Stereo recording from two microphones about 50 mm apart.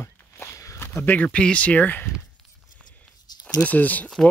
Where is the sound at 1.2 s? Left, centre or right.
Left.